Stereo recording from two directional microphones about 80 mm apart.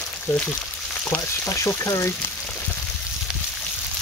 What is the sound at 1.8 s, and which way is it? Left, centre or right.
Speech, left.